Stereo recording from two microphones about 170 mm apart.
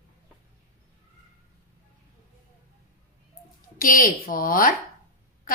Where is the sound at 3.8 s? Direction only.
55° left (ahead or behind).